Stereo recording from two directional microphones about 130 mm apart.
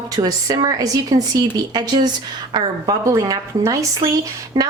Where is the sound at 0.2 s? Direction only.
30° right (ahead or behind).